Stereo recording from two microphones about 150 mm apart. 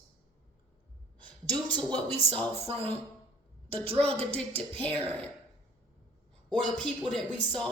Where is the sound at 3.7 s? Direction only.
40° right (ahead or behind).